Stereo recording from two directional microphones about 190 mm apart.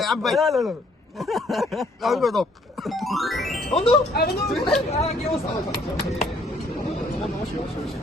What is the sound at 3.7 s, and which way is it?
Speech, 30° left (ahead or behind).